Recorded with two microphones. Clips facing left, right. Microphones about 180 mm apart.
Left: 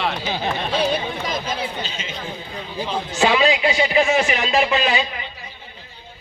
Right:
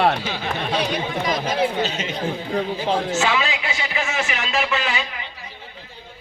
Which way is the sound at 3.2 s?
15° left (ahead or behind).